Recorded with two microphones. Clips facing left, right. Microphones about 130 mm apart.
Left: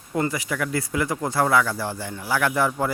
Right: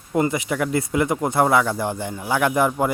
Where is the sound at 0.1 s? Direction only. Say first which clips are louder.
Right 4 dB; 20° right (ahead or behind).